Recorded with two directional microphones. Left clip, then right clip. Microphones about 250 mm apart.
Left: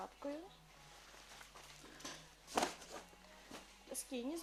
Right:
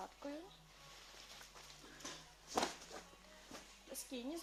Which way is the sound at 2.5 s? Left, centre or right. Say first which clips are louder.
Left 1 dB; left.